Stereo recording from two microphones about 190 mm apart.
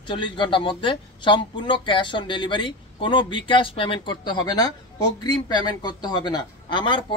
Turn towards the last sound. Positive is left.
turn(degrees=25)  # may be behind; listen again after turning